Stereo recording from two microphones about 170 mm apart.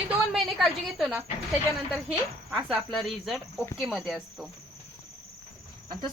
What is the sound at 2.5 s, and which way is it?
Cricket, centre (ahead or behind).